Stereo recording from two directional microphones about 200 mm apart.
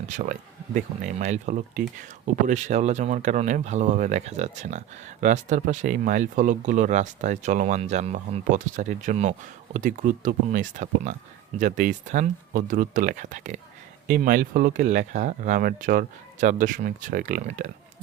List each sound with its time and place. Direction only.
0.1 s speech: 40° right (ahead or behind)